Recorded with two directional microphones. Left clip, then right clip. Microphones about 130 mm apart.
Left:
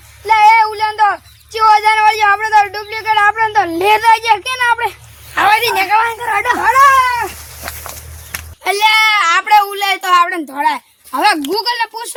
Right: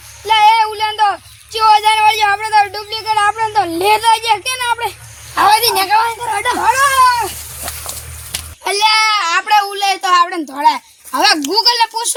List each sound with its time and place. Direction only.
0.3 s a sound: 20° right (ahead or behind)
3.0 s speech: 10° right (ahead or behind)
5.4 s a woman's voice: 5° left (ahead or behind)
8.6 s a child's voice: centre (ahead or behind); by 12.1 s 15° right (ahead or behind)